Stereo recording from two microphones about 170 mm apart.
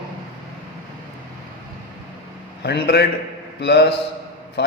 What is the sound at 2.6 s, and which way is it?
A man's voice, 70° left (ahead or behind).